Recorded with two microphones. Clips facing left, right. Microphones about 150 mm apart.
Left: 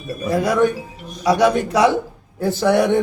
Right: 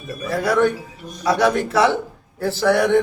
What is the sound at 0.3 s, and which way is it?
A man's voice, 15° left (ahead or behind).